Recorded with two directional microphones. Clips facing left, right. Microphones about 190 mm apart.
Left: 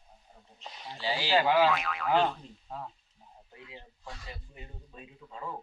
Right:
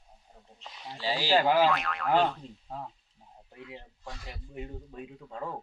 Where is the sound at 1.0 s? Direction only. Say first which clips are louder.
Right 2 dB; 40° right (ahead or behind).